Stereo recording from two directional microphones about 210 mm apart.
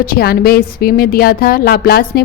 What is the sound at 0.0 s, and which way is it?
Speech, 45° left (ahead or behind).